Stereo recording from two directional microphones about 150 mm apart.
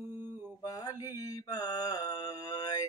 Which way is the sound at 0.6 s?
25° left (ahead or behind).